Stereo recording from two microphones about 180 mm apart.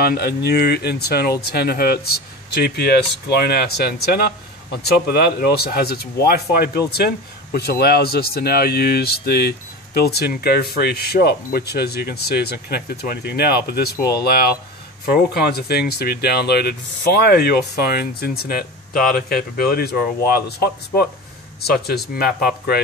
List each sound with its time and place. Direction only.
0.0 s speech: 60° left (ahead or behind)